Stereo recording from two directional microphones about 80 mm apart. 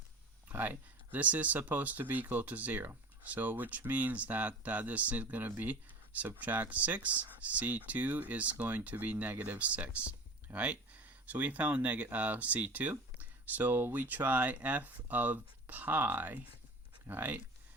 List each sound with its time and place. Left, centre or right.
0.4 s speech: right